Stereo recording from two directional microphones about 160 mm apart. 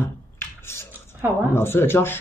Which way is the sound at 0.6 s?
15° left (ahead or behind).